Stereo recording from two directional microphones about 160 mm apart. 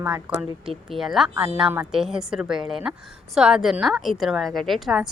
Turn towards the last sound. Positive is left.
turn(degrees=0)  # may be behind; listen again after turning